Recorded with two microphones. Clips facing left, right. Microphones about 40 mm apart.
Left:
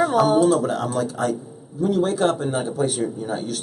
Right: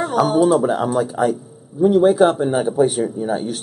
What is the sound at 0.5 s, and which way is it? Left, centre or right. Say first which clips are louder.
Speech: right 4 dB; centre.